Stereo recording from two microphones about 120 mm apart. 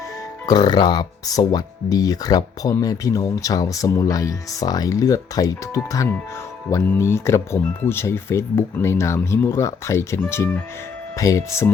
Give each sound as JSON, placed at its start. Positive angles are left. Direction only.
{"t": 0.4, "sound": "speech", "side_deg": 35}